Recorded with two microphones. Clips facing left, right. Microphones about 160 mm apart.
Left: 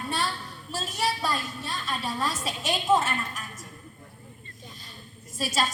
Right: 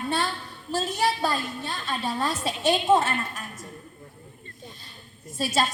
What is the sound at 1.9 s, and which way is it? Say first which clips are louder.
A woman's voice: right 3 dB; 30° right (ahead or behind).